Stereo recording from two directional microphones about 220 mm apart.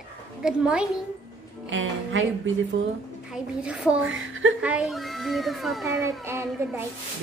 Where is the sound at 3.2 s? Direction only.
5° right (ahead or behind).